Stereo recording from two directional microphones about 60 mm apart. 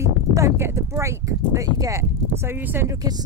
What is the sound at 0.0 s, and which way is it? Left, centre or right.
Speech, right.